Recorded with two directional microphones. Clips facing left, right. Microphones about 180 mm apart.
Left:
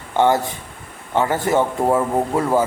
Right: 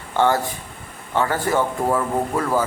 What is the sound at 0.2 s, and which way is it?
Speech, 20° left (ahead or behind).